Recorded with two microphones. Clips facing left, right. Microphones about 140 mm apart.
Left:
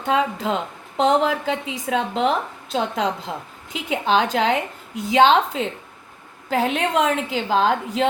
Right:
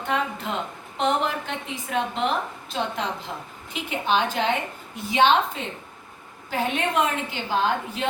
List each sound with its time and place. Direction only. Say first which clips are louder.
0.1 s a woman's voice: left 6 dB; 90° left